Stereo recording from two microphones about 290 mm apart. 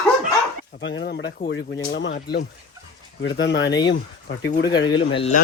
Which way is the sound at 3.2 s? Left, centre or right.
Left.